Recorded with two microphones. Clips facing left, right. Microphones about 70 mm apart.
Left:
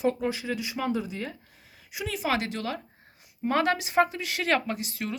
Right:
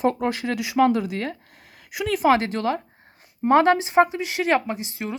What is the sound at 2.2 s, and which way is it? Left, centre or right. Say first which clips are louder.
Speech: right 9 dB; right.